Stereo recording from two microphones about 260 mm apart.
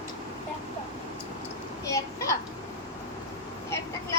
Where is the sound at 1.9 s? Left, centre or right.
Centre.